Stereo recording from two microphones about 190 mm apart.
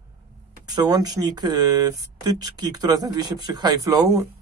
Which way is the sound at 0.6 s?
20° right (ahead or behind).